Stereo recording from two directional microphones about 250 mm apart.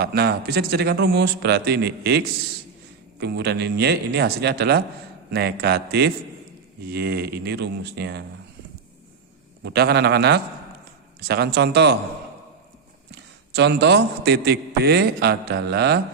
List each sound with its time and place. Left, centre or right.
0.0 s a man's voice: right
9.6 s a man's voice: right
13.1 s a man's voice: right